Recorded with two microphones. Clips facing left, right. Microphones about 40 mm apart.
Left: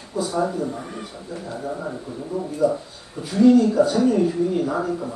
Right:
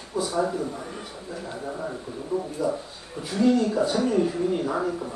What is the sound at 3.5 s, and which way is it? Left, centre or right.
Speech, centre.